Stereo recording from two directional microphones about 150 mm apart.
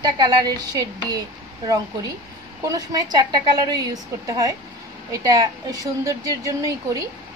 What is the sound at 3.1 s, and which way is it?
A woman's voice, 30° right (ahead or behind).